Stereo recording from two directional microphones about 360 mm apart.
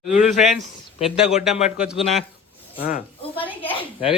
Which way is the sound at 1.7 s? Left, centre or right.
Centre.